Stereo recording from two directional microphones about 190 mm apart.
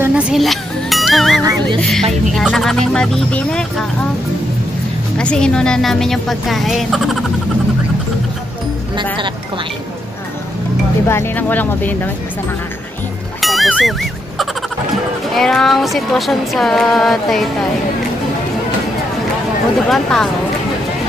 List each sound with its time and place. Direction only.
0.0 s speech: 5° right (ahead or behind)
1.4 s speech: 20° right (ahead or behind)
1.8 s music: centre (ahead or behind)
5.1 s music: 5° left (ahead or behind)
11.1 s speech: 10° left (ahead or behind)
13.4 s music: centre (ahead or behind)
15.3 s music: centre (ahead or behind)
19.9 s music: 5° left (ahead or behind)